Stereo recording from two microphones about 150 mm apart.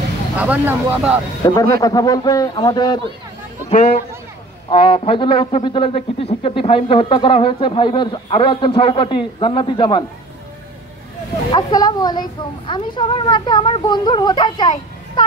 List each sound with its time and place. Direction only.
0.4 s speech: 10° right (ahead or behind)
1.4 s a man's voice: 25° left (ahead or behind)
4.6 s speech: 35° left (ahead or behind)
11.5 s speech: 25° left (ahead or behind)